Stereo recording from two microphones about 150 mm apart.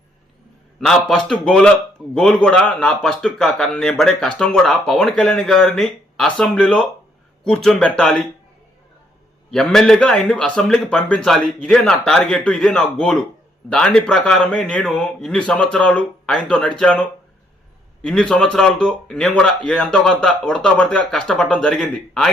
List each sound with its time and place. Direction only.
0.8 s a man's voice: centre (ahead or behind)
9.5 s a man's voice: 5° left (ahead or behind)
18.0 s a man's voice: 5° left (ahead or behind)